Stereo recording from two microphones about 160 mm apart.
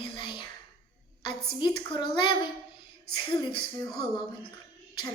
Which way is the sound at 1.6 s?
30° left (ahead or behind).